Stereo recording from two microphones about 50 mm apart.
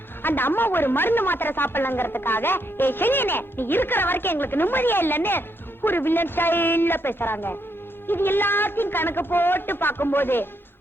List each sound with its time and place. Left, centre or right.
0.2 s speech: left